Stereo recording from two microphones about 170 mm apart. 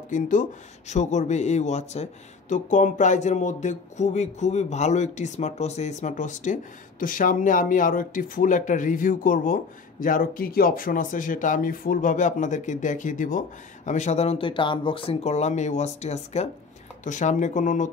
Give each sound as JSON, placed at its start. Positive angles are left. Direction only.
{"t": 0.1, "sound": "speech", "side_deg": 50}